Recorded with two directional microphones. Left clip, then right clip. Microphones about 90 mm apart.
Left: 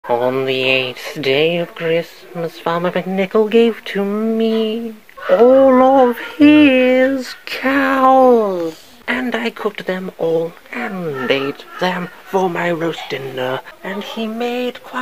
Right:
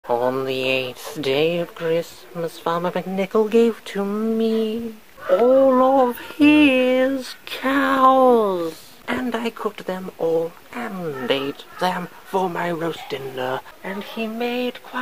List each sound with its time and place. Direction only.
0.1 s speech: 20° right (ahead or behind)
5.8 s speech: 15° left (ahead or behind)
6.4 s a sound: 5° right (ahead or behind)
6.7 s speech: 25° right (ahead or behind); by 8.1 s 40° right (ahead or behind)
8.1 s speech: 65° right (ahead or behind)
9.0 s speech: 10° right (ahead or behind)
11.2 s speech: 25° right (ahead or behind)
13.8 s speech: 45° right (ahead or behind); by 15.0 s 30° right (ahead or behind)